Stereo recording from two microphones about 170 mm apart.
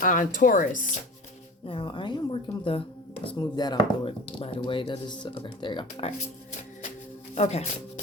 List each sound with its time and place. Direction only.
0.0 s speech: 50° left (ahead or behind)
1.6 s speech: 30° left (ahead or behind)
7.3 s speech: 40° left (ahead or behind)